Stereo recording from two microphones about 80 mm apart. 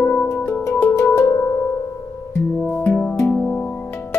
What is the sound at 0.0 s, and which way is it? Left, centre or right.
Music, left.